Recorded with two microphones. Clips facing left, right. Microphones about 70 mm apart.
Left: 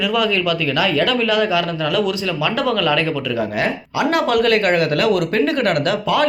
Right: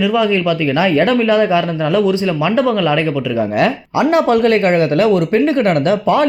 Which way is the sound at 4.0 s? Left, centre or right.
Right.